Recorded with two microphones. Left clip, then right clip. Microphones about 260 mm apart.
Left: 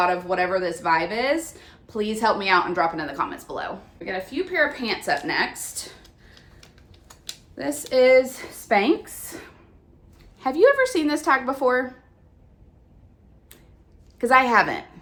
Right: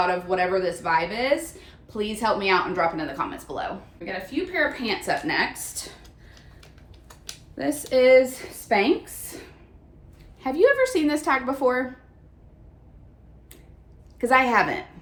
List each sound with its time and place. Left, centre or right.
0.0 s a woman's voice: centre
7.1 s a sound: centre
8.7 s a woman's voice: centre
10.4 s a woman's voice: centre
14.2 s a woman's voice: centre